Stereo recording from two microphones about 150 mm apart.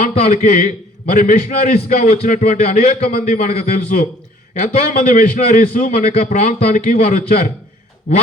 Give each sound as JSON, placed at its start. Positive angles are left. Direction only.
{"t": 0.0, "sound": "a man's voice", "side_deg": 50}
{"t": 3.2, "sound": "a man's voice", "side_deg": 60}
{"t": 3.7, "sound": "a man's voice", "side_deg": 65}
{"t": 5.9, "sound": "a man's voice", "side_deg": 45}